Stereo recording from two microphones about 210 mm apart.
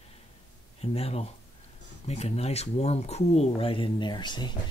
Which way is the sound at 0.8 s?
30° left (ahead or behind).